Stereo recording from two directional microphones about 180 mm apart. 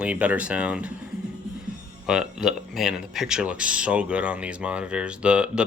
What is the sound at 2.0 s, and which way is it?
Speech, 5° right (ahead or behind).